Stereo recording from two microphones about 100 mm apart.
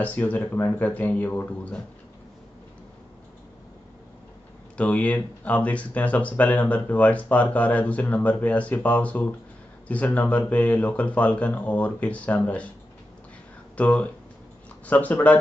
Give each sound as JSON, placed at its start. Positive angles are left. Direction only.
{"t": 0.0, "sound": "speech", "side_deg": 15}
{"t": 4.7, "sound": "speech", "side_deg": 15}
{"t": 13.7, "sound": "speech", "side_deg": 15}